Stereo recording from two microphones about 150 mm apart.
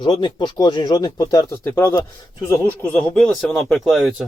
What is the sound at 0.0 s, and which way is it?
Speech, 30° left (ahead or behind).